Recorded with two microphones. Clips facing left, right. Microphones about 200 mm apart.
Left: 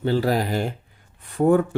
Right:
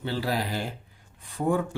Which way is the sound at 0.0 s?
50° left (ahead or behind).